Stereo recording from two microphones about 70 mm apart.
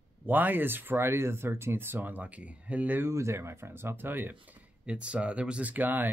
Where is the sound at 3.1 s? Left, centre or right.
Right.